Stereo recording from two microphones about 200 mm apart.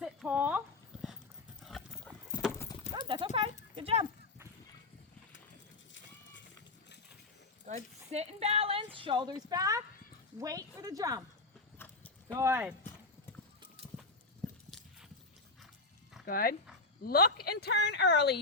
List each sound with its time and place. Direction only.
0.0 s a sound: 5° right (ahead or behind)
1.6 s clip-clop: centre (ahead or behind)
2.5 s clip-clop: 10° left (ahead or behind)
3.1 s horse: 25° right (ahead or behind)
3.8 s a sound: 30° right (ahead or behind)
7.7 s a sound: 35° right (ahead or behind); by 9.8 s 15° right (ahead or behind)
10.3 s speech: 15° right (ahead or behind)
12.3 s speech: 15° right (ahead or behind)
13.6 s clip-clop: 30° right (ahead or behind)
16.2 s a woman's voice: 45° left (ahead or behind)